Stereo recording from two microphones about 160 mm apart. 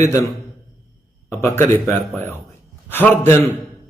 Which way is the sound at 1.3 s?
15° left (ahead or behind).